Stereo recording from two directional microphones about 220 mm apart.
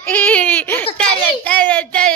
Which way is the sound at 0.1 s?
5° left (ahead or behind).